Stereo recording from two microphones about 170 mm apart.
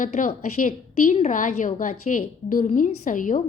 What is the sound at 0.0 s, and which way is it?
A woman's voice, 50° left (ahead or behind).